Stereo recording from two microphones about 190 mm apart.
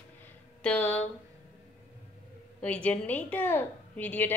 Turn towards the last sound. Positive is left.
turn(degrees=10)  # may be behind; listen again after turning